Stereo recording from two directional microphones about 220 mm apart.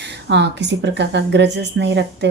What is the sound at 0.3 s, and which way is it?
A woman's voice, 50° right (ahead or behind).